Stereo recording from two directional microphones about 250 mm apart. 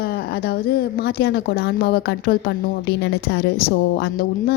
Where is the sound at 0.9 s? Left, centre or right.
Left.